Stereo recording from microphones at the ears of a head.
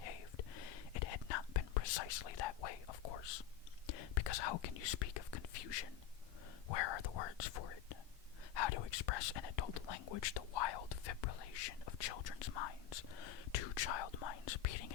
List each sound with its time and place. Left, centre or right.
0.0 s whispering: left
6.7 s speech: left